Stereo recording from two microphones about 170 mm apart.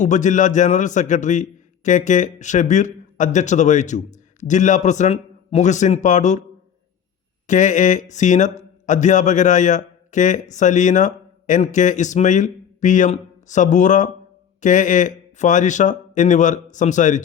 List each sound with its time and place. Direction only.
0.0 s a man's voice: 45° left (ahead or behind)
7.4 s a man's voice: 45° left (ahead or behind)